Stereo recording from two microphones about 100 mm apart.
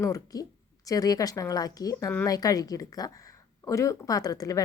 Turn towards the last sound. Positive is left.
turn(degrees=35)  # may be behind; listen again after turning